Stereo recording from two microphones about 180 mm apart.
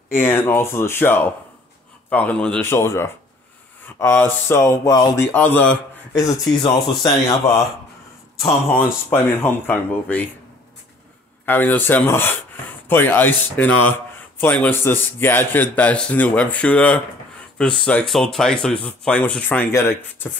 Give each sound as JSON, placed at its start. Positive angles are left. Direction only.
{"t": 0.1, "sound": "speech", "side_deg": 10}
{"t": 8.7, "sound": "speech", "side_deg": 10}
{"t": 11.4, "sound": "speech", "side_deg": 10}